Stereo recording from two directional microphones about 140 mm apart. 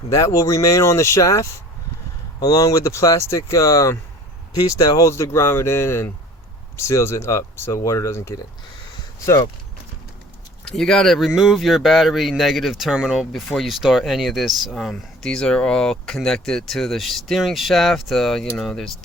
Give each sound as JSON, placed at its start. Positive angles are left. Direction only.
{"t": 0.1, "sound": "speech", "side_deg": 20}
{"t": 10.7, "sound": "speech", "side_deg": 5}